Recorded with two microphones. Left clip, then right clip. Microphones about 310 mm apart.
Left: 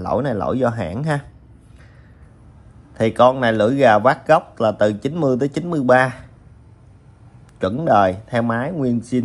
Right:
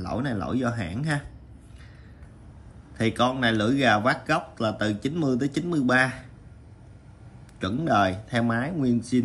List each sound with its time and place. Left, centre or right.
0.0 s speech: centre
3.0 s a man's voice: centre
7.5 s a man's voice: centre